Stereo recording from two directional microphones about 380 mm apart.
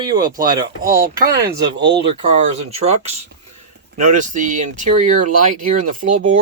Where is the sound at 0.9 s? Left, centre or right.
Right.